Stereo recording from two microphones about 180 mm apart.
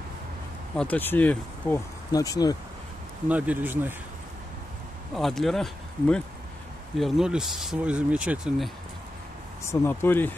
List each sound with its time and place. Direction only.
0.7 s speech: 10° left (ahead or behind)
2.1 s speech: 20° left (ahead or behind)
3.3 s speech: 10° right (ahead or behind)
5.1 s speech: centre (ahead or behind)
9.7 s speech: 10° left (ahead or behind)